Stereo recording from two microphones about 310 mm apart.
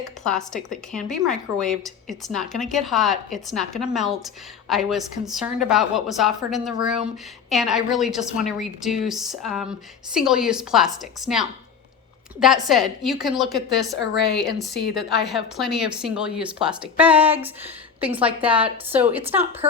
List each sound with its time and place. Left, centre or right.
0.3 s a woman's voice: centre
14.0 s speech: left
14.9 s a woman's voice: centre